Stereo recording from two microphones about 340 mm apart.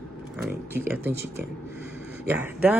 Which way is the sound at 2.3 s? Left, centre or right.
Centre.